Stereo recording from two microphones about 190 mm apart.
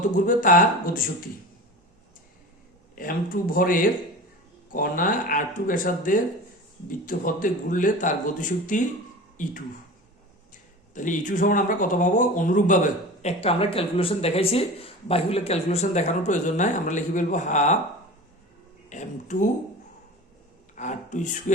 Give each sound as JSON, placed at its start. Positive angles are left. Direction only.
{"t": 0.0, "sound": "speech", "side_deg": 45}
{"t": 2.9, "sound": "speech", "side_deg": 45}
{"t": 10.5, "sound": "speech", "side_deg": 40}
{"t": 13.2, "sound": "speech", "side_deg": 30}
{"t": 18.9, "sound": "speech", "side_deg": 40}
{"t": 20.7, "sound": "speech", "side_deg": 40}